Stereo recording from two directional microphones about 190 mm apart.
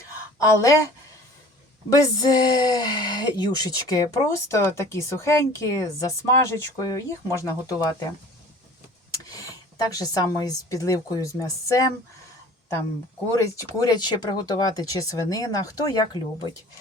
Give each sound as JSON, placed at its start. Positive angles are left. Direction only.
{"t": 0.3, "sound": "speech", "side_deg": 15}
{"t": 1.9, "sound": "speech", "side_deg": 20}
{"t": 9.1, "sound": "speech", "side_deg": 20}
{"t": 13.3, "sound": "speech", "side_deg": 15}